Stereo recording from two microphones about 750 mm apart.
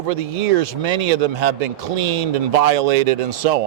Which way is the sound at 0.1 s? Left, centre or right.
Right.